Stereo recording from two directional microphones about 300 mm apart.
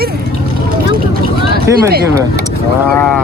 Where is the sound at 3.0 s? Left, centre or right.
Centre.